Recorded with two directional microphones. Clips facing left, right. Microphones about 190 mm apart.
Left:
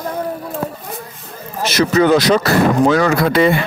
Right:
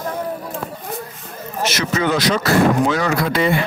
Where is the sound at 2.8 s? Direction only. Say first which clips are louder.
Left 5 dB; 65° left (ahead or behind).